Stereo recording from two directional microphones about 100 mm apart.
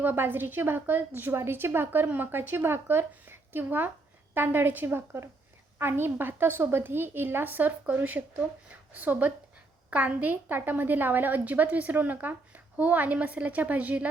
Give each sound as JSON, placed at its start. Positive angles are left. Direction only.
{"t": 0.0, "sound": "a woman's voice", "side_deg": -20}